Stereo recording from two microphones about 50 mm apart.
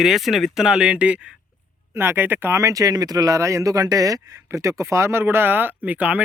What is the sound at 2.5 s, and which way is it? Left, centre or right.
A man's voice, right.